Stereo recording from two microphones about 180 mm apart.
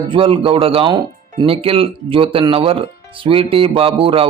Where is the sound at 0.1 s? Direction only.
30° right (ahead or behind).